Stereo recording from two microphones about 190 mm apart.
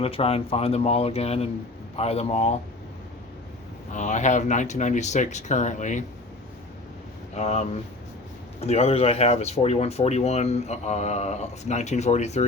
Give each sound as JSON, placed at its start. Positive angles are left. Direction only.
{"t": 0.0, "sound": "speech", "side_deg": 30}
{"t": 3.9, "sound": "speech", "side_deg": 40}
{"t": 7.3, "sound": "speech", "side_deg": 35}